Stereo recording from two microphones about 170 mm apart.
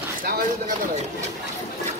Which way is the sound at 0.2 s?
55° right (ahead or behind).